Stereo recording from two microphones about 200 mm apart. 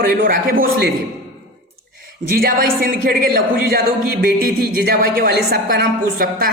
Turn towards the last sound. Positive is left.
turn(degrees=-50)  # may be behind; listen again after turning